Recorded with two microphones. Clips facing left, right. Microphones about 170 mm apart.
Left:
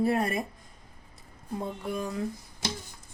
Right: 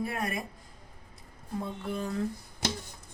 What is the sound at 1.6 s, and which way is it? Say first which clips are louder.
Speech: left 2 dB; 15° left (ahead or behind).